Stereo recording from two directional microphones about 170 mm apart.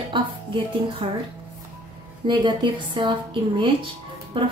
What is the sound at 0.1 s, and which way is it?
Speech, 30° right (ahead or behind).